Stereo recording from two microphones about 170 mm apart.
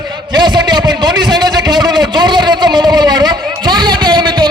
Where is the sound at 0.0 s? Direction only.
25° right (ahead or behind).